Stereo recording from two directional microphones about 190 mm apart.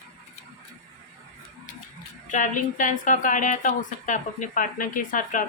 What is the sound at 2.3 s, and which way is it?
Speech, 40° left (ahead or behind).